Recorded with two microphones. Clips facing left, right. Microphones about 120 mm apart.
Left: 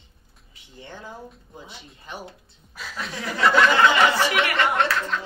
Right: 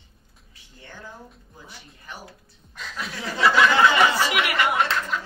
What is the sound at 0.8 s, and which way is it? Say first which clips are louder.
Speech: left 3 dB; 20° left (ahead or behind).